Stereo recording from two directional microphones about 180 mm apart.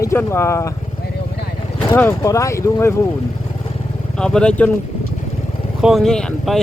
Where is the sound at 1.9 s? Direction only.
15° left (ahead or behind).